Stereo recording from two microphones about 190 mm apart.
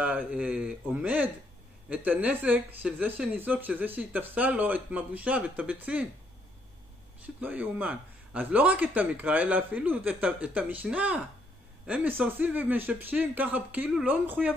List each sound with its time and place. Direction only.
0.3 s speech: 5° right (ahead or behind)
7.3 s speech: 10° right (ahead or behind)